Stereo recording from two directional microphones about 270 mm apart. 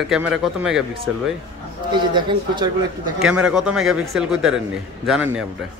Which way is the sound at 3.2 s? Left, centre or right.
Centre.